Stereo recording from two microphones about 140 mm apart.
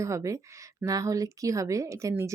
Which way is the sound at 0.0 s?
20° right (ahead or behind).